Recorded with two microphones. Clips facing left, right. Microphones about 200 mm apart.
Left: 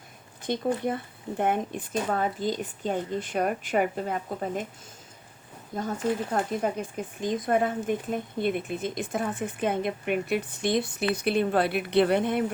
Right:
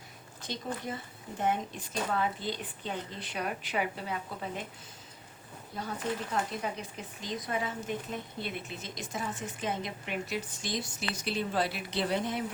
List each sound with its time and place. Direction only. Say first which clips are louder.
0.4 s speech: left 10 dB; 55° left (ahead or behind)
5.7 s speech: left 7 dB; 50° left (ahead or behind)